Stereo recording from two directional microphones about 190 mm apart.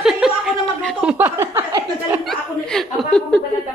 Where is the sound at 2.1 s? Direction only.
Centre (ahead or behind).